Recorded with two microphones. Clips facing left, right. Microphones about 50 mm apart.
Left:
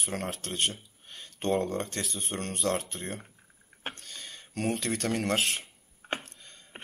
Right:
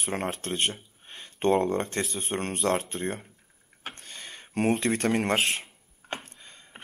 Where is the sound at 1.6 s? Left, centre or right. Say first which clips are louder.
Right 5 dB; right.